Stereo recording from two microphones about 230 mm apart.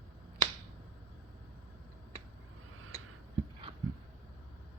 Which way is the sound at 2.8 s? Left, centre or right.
Right.